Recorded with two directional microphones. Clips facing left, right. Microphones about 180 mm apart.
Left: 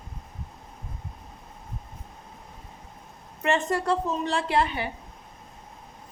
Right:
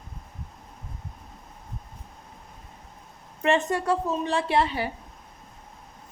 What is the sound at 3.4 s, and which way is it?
A woman's voice, 20° right (ahead or behind).